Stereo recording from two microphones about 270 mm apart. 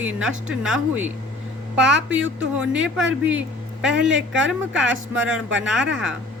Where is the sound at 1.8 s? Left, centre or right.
Right.